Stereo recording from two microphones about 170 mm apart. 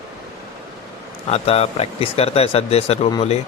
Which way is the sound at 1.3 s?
35° left (ahead or behind).